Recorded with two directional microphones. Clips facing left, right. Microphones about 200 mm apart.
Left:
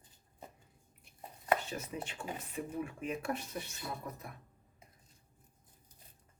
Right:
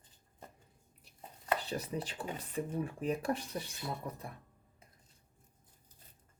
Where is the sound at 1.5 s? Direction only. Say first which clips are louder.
Right 3 dB; 35° right (ahead or behind).